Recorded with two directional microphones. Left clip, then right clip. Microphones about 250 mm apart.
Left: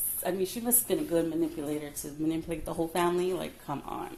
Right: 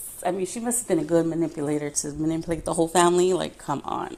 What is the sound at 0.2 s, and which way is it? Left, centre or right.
A woman's voice, right.